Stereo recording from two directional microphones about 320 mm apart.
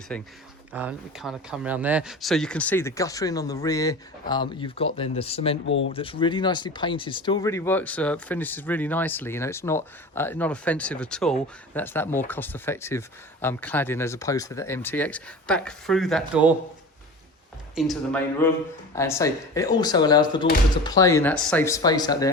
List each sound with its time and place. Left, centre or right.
0.1 s speech: centre
5.6 s speech: left
5.9 s speech: centre
17.7 s speech: centre